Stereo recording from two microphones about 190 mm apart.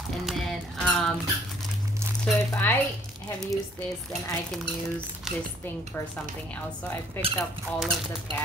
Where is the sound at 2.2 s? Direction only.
10° left (ahead or behind).